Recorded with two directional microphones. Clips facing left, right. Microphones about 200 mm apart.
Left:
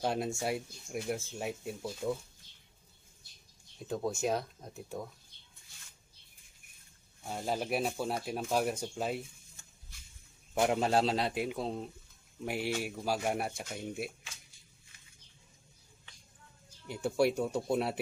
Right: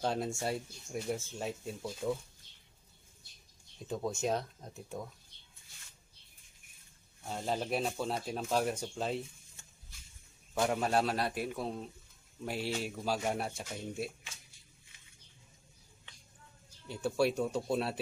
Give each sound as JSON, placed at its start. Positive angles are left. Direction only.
{"t": 0.0, "sound": "speech", "side_deg": 10}
{"t": 3.8, "sound": "speech", "side_deg": 0}
{"t": 7.2, "sound": "speech", "side_deg": 10}
{"t": 10.6, "sound": "a man's voice", "side_deg": 20}
{"t": 16.8, "sound": "speech", "side_deg": 15}